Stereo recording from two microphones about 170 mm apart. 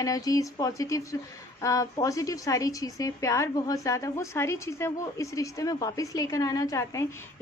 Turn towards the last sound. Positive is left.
turn(degrees=15)  # may be behind; listen again after turning